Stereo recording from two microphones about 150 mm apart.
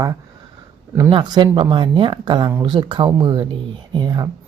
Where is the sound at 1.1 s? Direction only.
30° right (ahead or behind).